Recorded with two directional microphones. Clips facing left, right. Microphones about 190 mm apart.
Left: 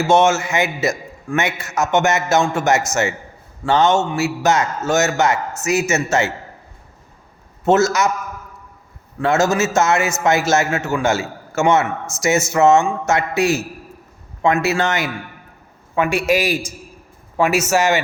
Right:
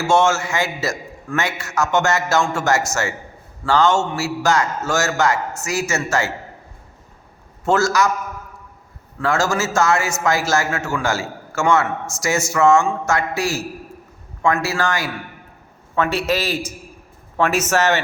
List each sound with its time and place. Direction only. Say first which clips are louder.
0.1 s a man's voice: left 2 dB; 20° left (ahead or behind)
7.6 s a man's voice: left 2 dB; 20° left (ahead or behind)
9.2 s a man's voice: left 3 dB; 20° left (ahead or behind)